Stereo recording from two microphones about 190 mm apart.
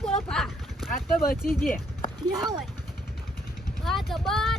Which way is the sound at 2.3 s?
20° right (ahead or behind).